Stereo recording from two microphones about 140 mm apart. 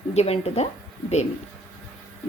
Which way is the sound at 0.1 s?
50° left (ahead or behind).